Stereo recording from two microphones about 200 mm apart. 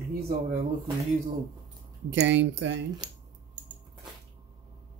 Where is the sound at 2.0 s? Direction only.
65° right (ahead or behind).